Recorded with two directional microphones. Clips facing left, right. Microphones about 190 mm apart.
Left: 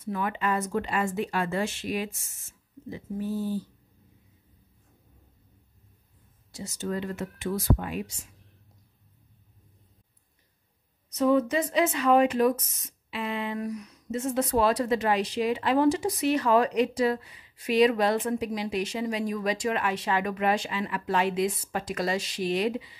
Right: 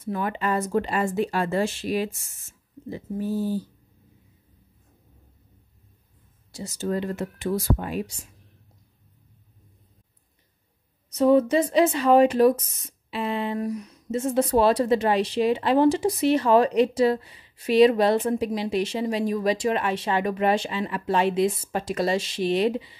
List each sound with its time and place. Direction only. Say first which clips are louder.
0.0 s speech: right 2 dB; 35° right (ahead or behind)
6.5 s speech: right 4 dB; 35° right (ahead or behind)
11.1 s speech: right 5 dB; 30° right (ahead or behind)